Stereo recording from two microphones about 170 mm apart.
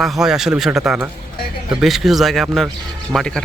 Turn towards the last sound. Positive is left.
turn(degrees=5)  # may be behind; listen again after turning